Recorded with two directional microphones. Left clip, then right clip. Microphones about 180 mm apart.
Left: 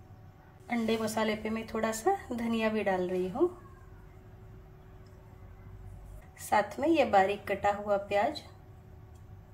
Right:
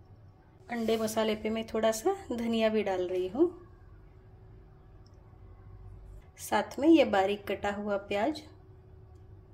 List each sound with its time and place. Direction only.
0.8 s a woman's voice: 40° right (ahead or behind)
6.3 s a woman's voice: 45° right (ahead or behind)